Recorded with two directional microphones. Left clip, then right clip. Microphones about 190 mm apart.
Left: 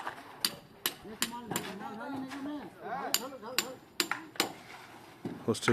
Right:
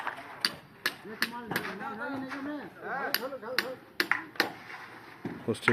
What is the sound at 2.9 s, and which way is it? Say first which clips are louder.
Hammer: right 3 dB; 45° left (ahead or behind).